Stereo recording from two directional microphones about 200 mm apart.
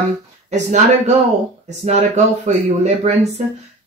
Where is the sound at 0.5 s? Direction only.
35° right (ahead or behind).